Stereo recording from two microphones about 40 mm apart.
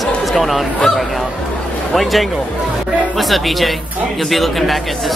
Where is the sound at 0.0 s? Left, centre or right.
Centre.